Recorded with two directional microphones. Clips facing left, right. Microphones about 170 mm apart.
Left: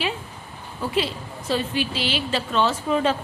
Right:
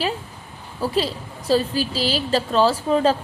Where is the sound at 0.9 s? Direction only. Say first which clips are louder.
Left 1 dB; 35° right (ahead or behind).